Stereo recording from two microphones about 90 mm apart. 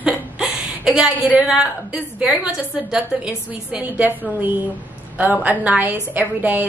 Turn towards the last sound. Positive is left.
turn(degrees=-20)  # may be behind; listen again after turning